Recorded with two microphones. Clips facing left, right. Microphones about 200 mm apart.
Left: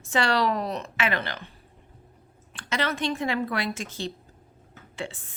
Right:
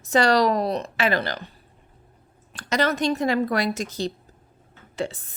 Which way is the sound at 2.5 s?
40° right (ahead or behind).